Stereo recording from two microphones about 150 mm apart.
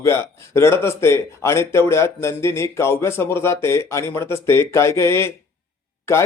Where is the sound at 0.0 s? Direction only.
15° left (ahead or behind).